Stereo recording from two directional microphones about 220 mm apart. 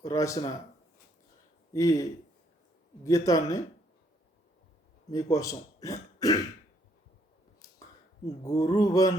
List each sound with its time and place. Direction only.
0.0 s speech: 15° left (ahead or behind)
1.7 s speech: 15° left (ahead or behind)
5.1 s speech: 15° left (ahead or behind)
7.6 s a sound: 15° left (ahead or behind)
8.4 s speech: 15° left (ahead or behind)